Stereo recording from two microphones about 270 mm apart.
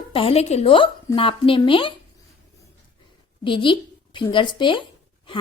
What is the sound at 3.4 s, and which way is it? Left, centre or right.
Speech, centre.